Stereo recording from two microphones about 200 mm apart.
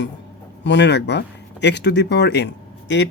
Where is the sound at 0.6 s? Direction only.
60° left (ahead or behind).